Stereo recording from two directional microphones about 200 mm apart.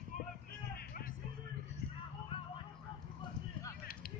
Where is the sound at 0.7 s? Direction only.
50° left (ahead or behind).